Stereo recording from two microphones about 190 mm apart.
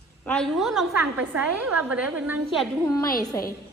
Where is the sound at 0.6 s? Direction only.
Centre (ahead or behind).